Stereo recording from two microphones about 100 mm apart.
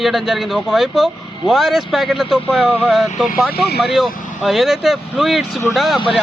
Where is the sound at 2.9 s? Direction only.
5° right (ahead or behind).